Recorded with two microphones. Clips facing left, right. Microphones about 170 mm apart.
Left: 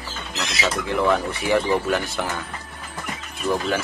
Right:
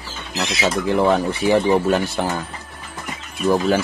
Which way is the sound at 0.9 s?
30° right (ahead or behind).